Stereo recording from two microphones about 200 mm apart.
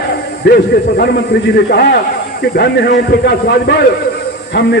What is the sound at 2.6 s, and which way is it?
A man's voice, 55° left (ahead or behind).